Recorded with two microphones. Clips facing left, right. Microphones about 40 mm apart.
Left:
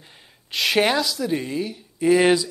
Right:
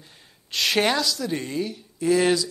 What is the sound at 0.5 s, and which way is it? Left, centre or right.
A man's voice, centre.